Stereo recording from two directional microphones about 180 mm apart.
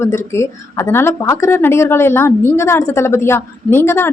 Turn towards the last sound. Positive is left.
turn(degrees=10)  # may be behind; listen again after turning